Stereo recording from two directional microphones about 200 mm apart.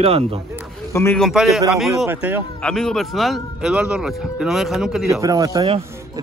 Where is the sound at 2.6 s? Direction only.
5° left (ahead or behind).